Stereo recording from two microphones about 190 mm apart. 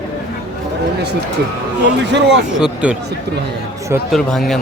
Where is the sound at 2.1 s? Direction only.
65° right (ahead or behind).